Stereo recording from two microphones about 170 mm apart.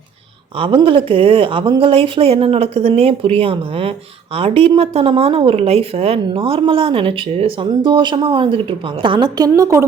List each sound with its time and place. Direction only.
0.6 s a woman's voice: 30° right (ahead or behind)